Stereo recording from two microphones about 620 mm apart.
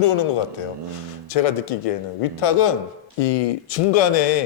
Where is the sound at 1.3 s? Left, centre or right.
Left.